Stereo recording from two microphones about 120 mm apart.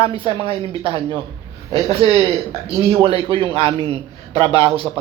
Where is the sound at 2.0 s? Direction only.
50° right (ahead or behind).